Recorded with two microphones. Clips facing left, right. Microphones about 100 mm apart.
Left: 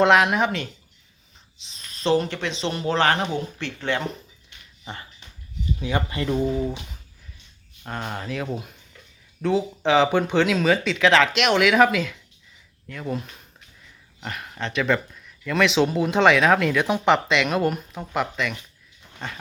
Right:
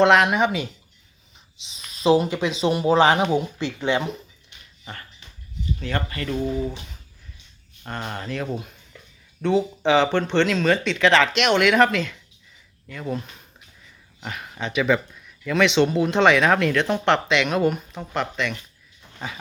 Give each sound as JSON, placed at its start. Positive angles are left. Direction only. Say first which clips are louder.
{"t": 0.0, "sound": "speech", "louder": "right 1 dB", "side_deg": 0}
{"t": 5.8, "sound": "speech", "louder": "left 3 dB", "side_deg": 15}
{"t": 7.9, "sound": "speech", "louder": "even", "side_deg": 0}